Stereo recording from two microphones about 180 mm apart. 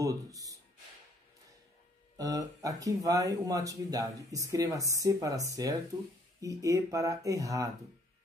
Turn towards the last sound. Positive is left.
turn(degrees=-20)  # may be behind; listen again after turning